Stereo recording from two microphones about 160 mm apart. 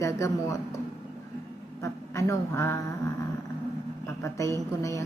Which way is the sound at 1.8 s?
20° left (ahead or behind).